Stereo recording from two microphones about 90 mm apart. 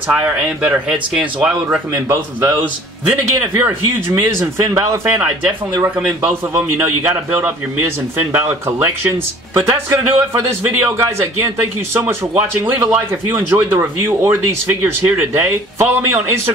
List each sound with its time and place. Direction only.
0.1 s speech: 15° right (ahead or behind)
3.1 s a man's voice: 20° right (ahead or behind)
6.2 s a man's voice: 20° right (ahead or behind)